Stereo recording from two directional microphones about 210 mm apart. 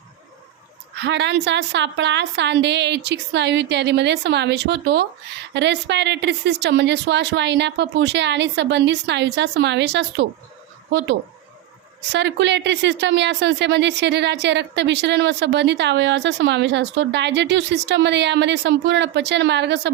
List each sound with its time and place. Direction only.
0.9 s speech: 55° right (ahead or behind)
12.1 s speech: 55° right (ahead or behind)